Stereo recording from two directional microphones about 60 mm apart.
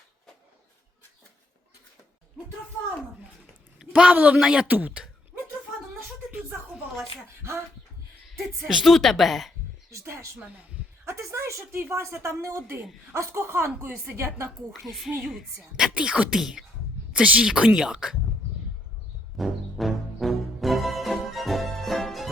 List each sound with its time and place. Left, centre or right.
3.8 s a sound: centre
4.4 s speech: centre
4.7 s speech: right
8.4 s a woman's voice: centre
10.0 s a woman's voice: right
10.4 s speech: right
11.0 s a sound: right
11.8 s a woman's voice: right
14.2 s a woman's voice: right
14.7 s a woman's voice: centre
16.0 s speech: centre
16.3 s speech: centre
17.2 s speech: right
19.4 s music: centre